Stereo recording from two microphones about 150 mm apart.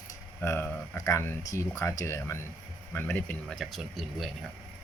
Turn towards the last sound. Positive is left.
turn(degrees=0)  # may be behind; listen again after turning